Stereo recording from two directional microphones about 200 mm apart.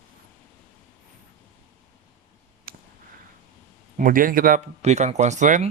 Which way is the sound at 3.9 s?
45° right (ahead or behind).